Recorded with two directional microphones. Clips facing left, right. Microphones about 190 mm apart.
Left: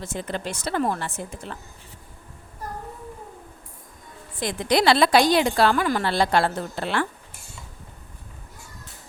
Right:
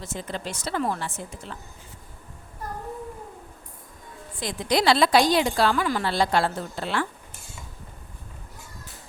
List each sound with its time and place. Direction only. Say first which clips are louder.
0.0 s a woman's voice: left 3 dB; 55° left (ahead or behind)
4.4 s a woman's voice: left 3 dB; 60° left (ahead or behind)